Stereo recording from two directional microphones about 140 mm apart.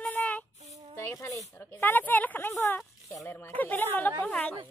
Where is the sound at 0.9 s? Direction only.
20° left (ahead or behind).